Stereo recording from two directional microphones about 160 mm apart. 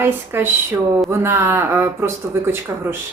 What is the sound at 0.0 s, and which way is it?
Speech, 15° right (ahead or behind).